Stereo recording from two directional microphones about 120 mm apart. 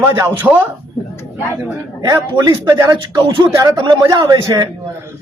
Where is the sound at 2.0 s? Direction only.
30° right (ahead or behind).